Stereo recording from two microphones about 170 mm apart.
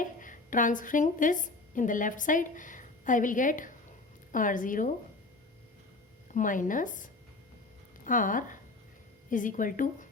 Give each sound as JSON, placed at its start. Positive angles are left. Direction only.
{"t": 0.0, "sound": "a woman's voice", "side_deg": 50}
{"t": 6.3, "sound": "speech", "side_deg": 50}